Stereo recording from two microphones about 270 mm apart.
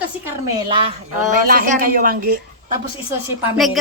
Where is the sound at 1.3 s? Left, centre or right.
Right.